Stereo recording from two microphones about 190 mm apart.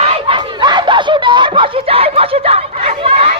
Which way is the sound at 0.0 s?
25° right (ahead or behind).